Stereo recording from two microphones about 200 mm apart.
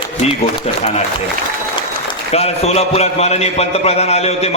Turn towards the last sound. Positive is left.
turn(degrees=30)  # may be behind; listen again after turning